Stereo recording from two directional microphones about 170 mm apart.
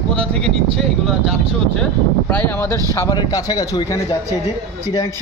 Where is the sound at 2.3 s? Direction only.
10° left (ahead or behind).